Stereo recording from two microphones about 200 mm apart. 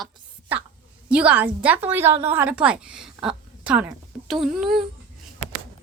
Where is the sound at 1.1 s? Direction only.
5° right (ahead or behind).